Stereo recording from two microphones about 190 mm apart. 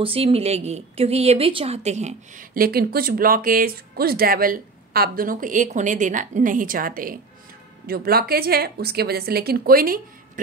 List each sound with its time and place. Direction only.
0.0 s a woman's voice: 30° right (ahead or behind); by 10.4 s 50° right (ahead or behind)